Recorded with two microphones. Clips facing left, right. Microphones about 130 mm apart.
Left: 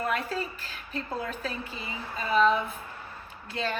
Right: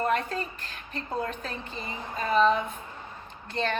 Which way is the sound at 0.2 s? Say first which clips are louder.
Even; 10° left (ahead or behind).